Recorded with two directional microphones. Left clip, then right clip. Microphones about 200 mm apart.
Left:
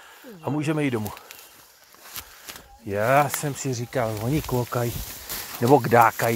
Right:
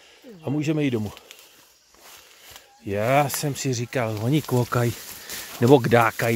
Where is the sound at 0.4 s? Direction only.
20° right (ahead or behind).